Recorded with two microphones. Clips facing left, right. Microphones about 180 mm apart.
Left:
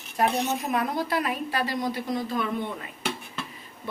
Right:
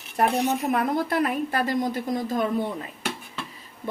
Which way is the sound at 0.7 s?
55° right (ahead or behind).